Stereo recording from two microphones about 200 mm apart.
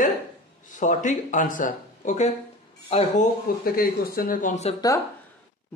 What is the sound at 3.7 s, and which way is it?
Speech, 50° left (ahead or behind).